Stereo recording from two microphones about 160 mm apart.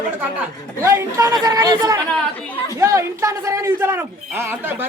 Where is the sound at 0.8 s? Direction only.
15° right (ahead or behind).